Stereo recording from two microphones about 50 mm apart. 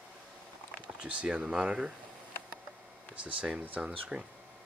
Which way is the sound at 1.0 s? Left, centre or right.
Right.